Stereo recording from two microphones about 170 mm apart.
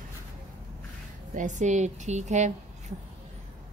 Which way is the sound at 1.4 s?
45° right (ahead or behind).